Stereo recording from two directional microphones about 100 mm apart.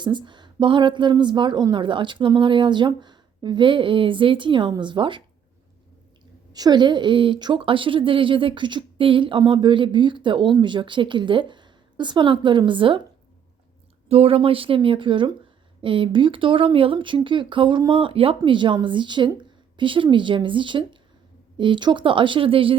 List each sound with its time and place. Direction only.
0.0 s speech: 50° right (ahead or behind)
6.5 s speech: 45° right (ahead or behind)
14.1 s speech: 80° right; by 22.8 s 60° right (ahead or behind)